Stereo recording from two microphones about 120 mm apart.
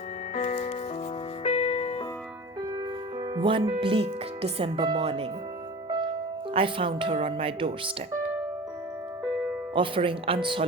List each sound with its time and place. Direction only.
0.3 s music: 80° left
1.5 s music: 60° left (ahead or behind)
3.3 s speech: 45° right (ahead or behind)
4.8 s speech: 40° right (ahead or behind)
5.0 s speech: 55° right (ahead or behind)
6.5 s speech: 50° right (ahead or behind)
9.7 s speech: 45° right (ahead or behind)